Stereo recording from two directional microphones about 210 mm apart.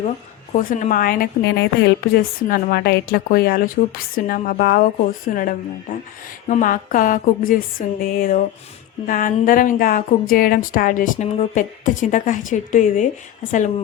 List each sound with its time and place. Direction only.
0.5 s a woman's voice: 35° left (ahead or behind)